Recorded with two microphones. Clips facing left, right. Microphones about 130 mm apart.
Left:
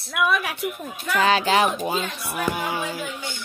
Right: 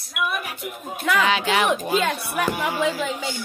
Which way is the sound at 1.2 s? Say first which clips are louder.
Left 3 dB; 35° left (ahead or behind).